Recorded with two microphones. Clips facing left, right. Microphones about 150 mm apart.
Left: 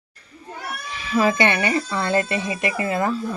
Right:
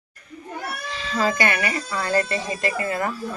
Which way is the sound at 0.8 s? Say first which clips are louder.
Left 4 dB; 15° left (ahead or behind).